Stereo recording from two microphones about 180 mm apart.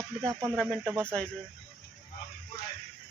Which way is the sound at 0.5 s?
5° left (ahead or behind).